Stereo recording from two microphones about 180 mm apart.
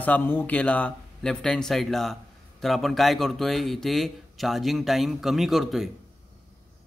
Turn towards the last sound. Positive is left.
turn(degrees=0)  # may be behind; listen again after turning